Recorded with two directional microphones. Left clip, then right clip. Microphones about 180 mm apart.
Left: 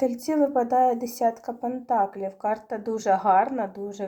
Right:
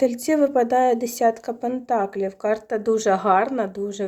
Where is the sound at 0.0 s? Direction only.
40° right (ahead or behind).